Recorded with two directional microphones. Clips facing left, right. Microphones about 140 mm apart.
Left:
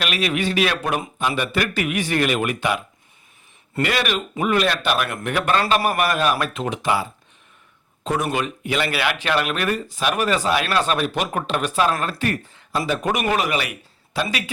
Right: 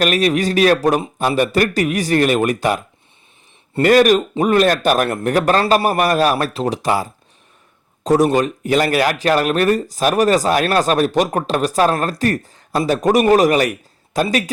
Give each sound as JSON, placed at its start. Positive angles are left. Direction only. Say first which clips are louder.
{"t": 0.0, "sound": "a man's voice", "louder": "right 7 dB", "side_deg": -40}